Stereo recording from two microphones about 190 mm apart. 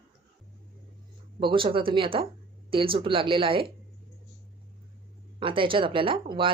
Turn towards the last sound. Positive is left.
turn(degrees=-25)  # may be behind; listen again after turning